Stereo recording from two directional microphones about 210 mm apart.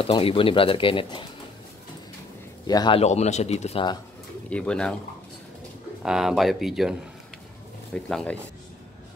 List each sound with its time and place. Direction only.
0.0 s speech: 25° left (ahead or behind)
2.6 s speech: 20° left (ahead or behind)
4.5 s speech: 5° left (ahead or behind)
6.0 s speech: centre (ahead or behind)